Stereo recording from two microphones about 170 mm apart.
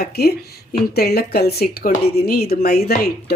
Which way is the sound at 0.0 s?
70° left (ahead or behind).